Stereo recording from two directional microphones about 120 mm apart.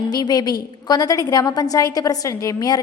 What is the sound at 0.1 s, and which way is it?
A woman's voice, 35° left (ahead or behind).